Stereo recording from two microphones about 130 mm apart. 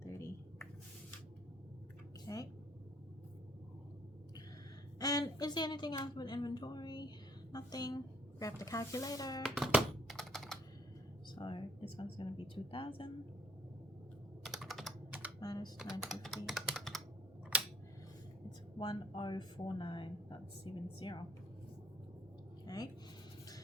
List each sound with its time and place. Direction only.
0.0 s a sound: 20° left (ahead or behind)
2.2 s a sound: 30° left (ahead or behind)
4.9 s a woman's voice: 30° left (ahead or behind)
9.4 s music: centre (ahead or behind)
11.3 s speech: 40° left (ahead or behind)
14.4 s computer keyboard: centre (ahead or behind)
15.4 s speech: 30° left (ahead or behind)
15.8 s speech: centre (ahead or behind)
18.8 s speech: 35° left (ahead or behind)
22.6 s a sound: 30° left (ahead or behind)